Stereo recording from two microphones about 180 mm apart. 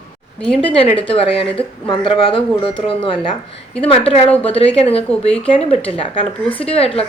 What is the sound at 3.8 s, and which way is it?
Speech, 30° left (ahead or behind).